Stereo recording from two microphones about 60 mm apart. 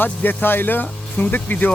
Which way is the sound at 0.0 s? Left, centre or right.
Left.